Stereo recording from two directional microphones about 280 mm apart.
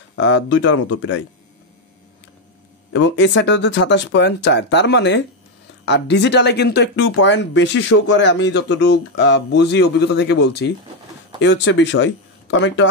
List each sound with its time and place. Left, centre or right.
0.1 s speech: left
2.9 s speech: left